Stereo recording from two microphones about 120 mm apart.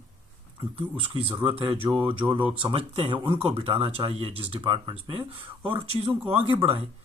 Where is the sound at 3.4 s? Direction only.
55° right (ahead or behind).